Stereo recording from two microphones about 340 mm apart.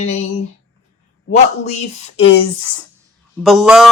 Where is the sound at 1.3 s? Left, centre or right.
Centre.